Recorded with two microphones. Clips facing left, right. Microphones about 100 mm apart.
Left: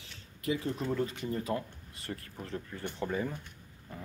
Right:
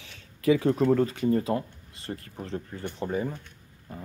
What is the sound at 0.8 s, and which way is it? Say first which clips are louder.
Speech: right 10 dB; 55° right (ahead or behind).